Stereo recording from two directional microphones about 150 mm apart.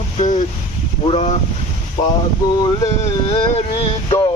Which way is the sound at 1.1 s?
45° left (ahead or behind).